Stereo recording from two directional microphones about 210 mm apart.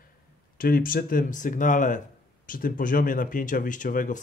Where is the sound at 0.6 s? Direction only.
45° left (ahead or behind).